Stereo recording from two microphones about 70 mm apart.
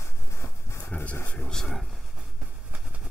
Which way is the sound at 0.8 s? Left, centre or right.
Left.